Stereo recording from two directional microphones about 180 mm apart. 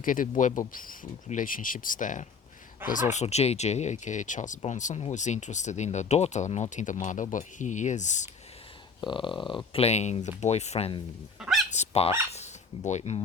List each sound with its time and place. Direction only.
0.0 s speech: 50° left (ahead or behind)
9.0 s a sound: 25° left (ahead or behind)
9.7 s speech: 35° left (ahead or behind)
11.3 s dog: 5° right (ahead or behind)
11.7 s dog: 35° left (ahead or behind)
12.3 s cutlery: 40° left (ahead or behind)